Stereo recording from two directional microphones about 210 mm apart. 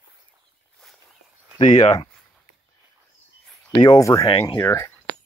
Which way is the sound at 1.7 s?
20° left (ahead or behind).